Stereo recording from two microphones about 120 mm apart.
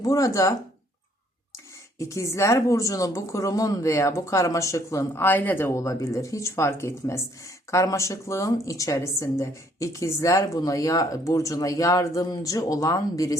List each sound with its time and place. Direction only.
0.0 s speech: 30° left (ahead or behind)
2.0 s speech: 25° left (ahead or behind)